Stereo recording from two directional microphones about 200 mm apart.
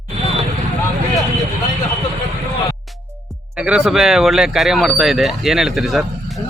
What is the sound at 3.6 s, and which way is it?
Speech, 5° right (ahead or behind).